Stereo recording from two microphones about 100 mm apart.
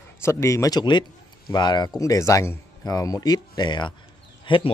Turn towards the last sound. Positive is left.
turn(degrees=55)  # may be behind; listen again after turning